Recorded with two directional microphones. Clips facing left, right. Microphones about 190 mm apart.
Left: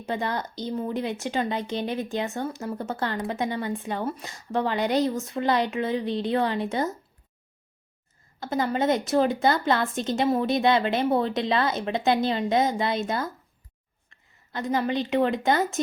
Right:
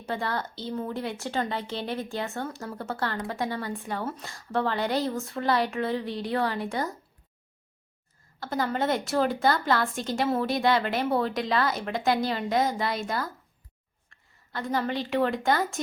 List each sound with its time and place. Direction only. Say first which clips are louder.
0.1 s speech: left 2 dB; 20° left (ahead or behind)
8.4 s a woman's voice: left 3 dB; 20° left (ahead or behind)